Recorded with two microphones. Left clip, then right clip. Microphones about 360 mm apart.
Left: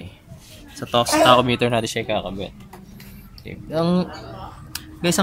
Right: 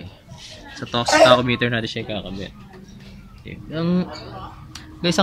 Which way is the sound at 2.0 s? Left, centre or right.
Left.